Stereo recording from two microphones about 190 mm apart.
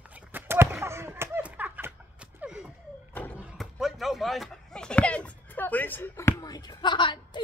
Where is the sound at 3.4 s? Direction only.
Centre (ahead or behind).